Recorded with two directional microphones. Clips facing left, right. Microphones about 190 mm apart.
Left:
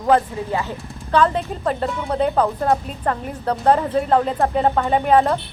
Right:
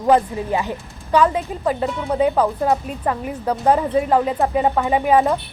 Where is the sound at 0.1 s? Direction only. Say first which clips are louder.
Right 1 dB; 15° right (ahead or behind).